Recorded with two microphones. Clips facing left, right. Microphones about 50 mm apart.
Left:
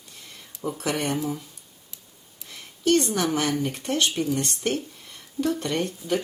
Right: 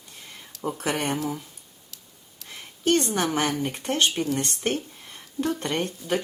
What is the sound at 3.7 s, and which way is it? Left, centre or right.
Speech, right.